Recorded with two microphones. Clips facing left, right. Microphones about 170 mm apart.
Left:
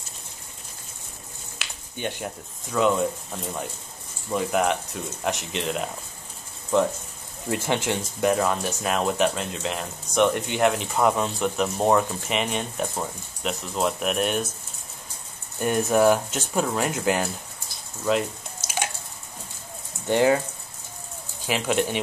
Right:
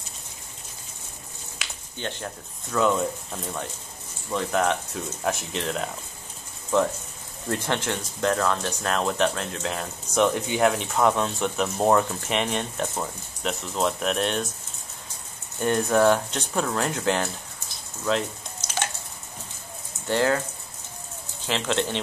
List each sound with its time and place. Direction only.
2.0 s speech: 10° left (ahead or behind)
7.4 s speech: 10° left (ahead or behind)
15.6 s speech: 10° left (ahead or behind)
18.0 s a sound: 5° left (ahead or behind)
20.1 s speech: 15° left (ahead or behind)
21.5 s speech: 10° left (ahead or behind)